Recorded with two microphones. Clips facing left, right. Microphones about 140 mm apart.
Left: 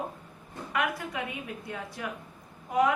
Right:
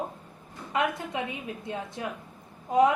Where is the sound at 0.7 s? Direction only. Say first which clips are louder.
Right 3 dB; 25° right (ahead or behind).